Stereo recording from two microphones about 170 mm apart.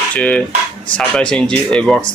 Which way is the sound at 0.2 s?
5° left (ahead or behind).